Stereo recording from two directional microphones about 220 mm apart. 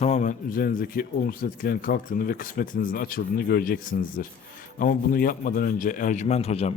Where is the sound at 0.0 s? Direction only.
30° left (ahead or behind).